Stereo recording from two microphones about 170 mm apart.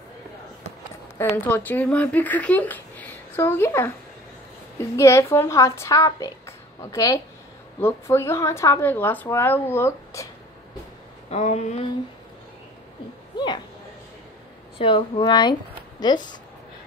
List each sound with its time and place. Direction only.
1.1 s speech: 15° left (ahead or behind)
11.2 s a sound: 40° left (ahead or behind)
14.8 s speech: 30° left (ahead or behind)